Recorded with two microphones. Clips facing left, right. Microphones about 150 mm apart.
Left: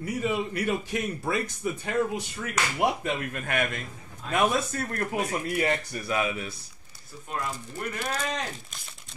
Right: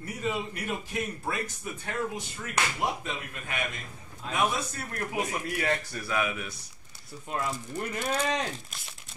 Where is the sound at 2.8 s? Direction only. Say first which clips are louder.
Left 6 dB; 60° left (ahead or behind).